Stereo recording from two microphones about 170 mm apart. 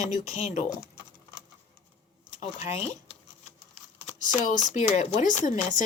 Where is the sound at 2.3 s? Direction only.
45° left (ahead or behind).